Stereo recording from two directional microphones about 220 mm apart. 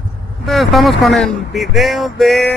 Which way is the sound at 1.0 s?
Centre (ahead or behind).